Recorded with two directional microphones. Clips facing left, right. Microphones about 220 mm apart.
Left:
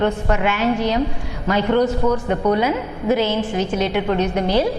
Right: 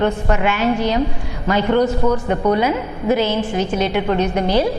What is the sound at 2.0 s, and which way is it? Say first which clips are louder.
A woman's voice: right 1 dB; 25° right (ahead or behind).